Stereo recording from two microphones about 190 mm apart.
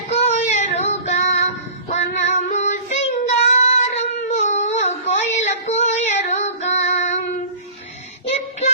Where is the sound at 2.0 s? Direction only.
35° left (ahead or behind).